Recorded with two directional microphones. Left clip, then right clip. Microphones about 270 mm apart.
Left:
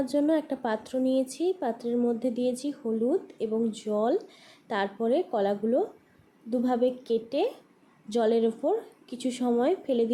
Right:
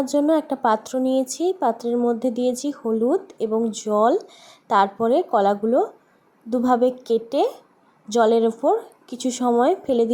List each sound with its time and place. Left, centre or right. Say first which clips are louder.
0.0 s speech: right 6 dB; centre